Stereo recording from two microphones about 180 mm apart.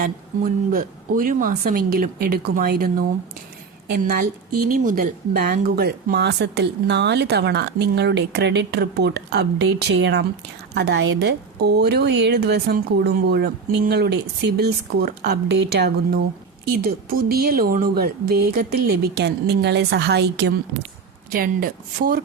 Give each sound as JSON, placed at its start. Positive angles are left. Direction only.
{"t": 0.0, "sound": "a woman's voice", "side_deg": -55}
{"t": 16.6, "sound": "a woman's voice", "side_deg": -55}
{"t": 21.3, "sound": "a woman's voice", "side_deg": -55}